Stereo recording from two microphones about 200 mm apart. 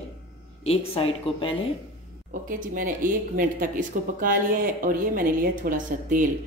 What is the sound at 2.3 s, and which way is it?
Speech, 40° right (ahead or behind).